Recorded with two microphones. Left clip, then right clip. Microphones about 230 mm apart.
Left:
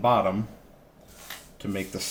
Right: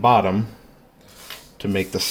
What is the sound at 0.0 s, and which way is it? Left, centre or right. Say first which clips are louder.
Speech: right 6 dB; right.